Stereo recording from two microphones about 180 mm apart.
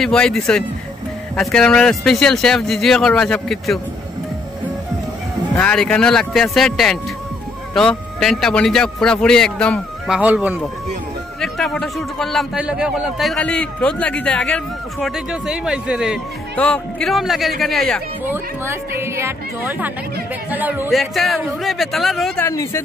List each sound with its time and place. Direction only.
0.0 s a man's voice: 5° left (ahead or behind)
5.6 s a man's voice: 5° left (ahead or behind)
11.4 s a man's voice: centre (ahead or behind)
18.2 s a man's voice: 15° right (ahead or behind)
22.4 s speech: 15° left (ahead or behind)